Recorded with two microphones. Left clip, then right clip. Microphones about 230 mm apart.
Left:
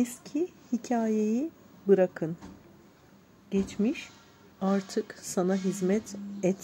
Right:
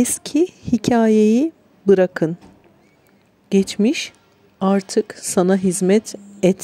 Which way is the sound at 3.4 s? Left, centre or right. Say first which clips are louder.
Right 12 dB; right.